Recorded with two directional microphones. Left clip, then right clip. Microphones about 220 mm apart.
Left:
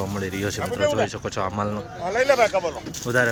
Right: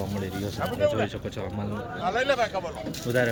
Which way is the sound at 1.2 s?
5° right (ahead or behind).